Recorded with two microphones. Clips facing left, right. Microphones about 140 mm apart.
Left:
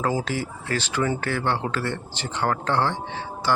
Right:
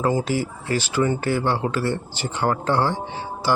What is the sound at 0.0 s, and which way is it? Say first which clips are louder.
Speech: right 4 dB; centre (ahead or behind).